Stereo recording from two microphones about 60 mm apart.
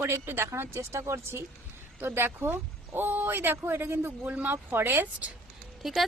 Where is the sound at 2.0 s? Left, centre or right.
Right.